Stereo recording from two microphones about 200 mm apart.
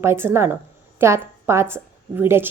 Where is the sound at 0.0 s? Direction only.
10° right (ahead or behind).